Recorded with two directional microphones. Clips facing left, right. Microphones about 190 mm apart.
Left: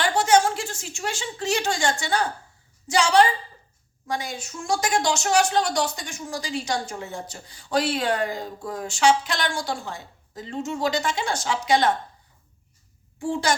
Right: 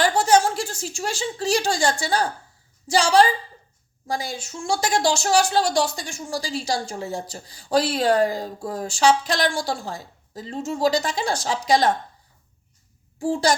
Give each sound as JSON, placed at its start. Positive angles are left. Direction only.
{"t": 0.0, "sound": "a woman's voice", "side_deg": -35}
{"t": 13.2, "sound": "a woman's voice", "side_deg": -35}